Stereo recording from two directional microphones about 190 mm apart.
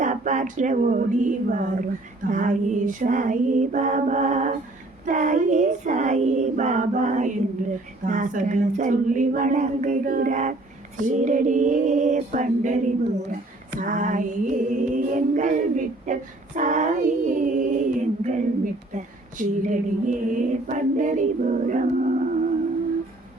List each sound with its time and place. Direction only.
0.0 s female singing: 40° right (ahead or behind)
13.7 s music: 45° right (ahead or behind)
16.6 s female singing: 40° right (ahead or behind)